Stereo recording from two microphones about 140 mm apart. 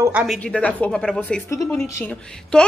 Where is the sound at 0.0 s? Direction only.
10° right (ahead or behind).